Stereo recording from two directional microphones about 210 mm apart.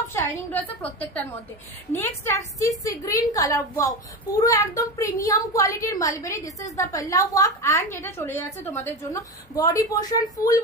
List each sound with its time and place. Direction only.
0.1 s a woman's voice: 10° left (ahead or behind)
1.9 s a woman's voice: 10° left (ahead or behind)